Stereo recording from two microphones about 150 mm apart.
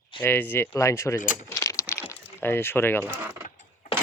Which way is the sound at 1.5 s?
20° left (ahead or behind).